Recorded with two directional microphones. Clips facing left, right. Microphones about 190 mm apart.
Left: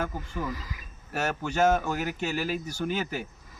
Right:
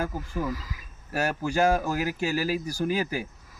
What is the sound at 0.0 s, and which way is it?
Speech, 5° right (ahead or behind).